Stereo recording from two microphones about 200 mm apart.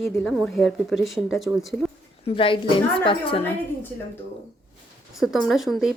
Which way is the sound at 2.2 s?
25° left (ahead or behind).